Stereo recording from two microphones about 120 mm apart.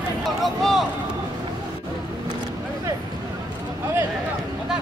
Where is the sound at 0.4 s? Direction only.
Centre (ahead or behind).